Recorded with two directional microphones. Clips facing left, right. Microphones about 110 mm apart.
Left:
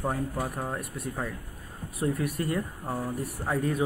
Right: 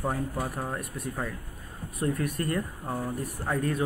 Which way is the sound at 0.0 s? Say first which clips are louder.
Even; 15° left (ahead or behind).